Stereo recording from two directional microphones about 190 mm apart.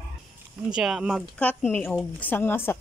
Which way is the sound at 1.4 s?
10° left (ahead or behind).